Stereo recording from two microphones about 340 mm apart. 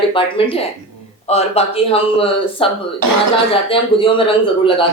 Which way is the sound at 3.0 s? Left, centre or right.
Right.